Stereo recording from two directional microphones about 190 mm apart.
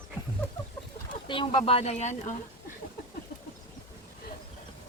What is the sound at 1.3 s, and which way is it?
Speech, 30° left (ahead or behind).